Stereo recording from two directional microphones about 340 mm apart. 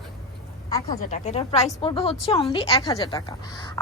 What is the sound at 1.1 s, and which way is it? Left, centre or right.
A woman's voice, centre.